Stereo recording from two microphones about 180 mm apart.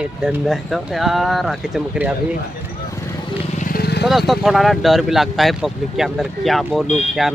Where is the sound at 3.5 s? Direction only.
50° left (ahead or behind).